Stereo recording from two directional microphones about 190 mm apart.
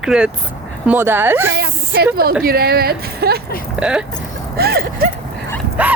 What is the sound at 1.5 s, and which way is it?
A woman's voice, 55° right (ahead or behind).